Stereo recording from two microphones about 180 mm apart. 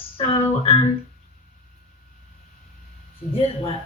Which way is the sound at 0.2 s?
30° left (ahead or behind).